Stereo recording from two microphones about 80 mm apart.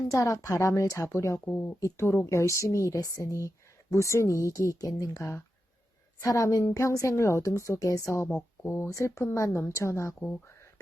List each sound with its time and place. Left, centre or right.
0.1 s a woman's voice: left
1.5 s speech: left
1.8 s a woman's voice: left